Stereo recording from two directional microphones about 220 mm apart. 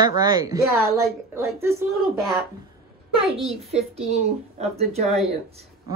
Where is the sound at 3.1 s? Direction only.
25° right (ahead or behind).